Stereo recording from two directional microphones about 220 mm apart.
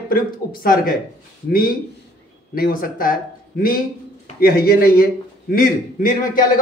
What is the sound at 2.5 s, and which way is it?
A man's voice, 40° left (ahead or behind).